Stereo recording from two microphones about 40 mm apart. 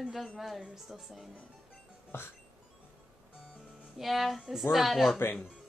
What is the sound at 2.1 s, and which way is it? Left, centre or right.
Music, left.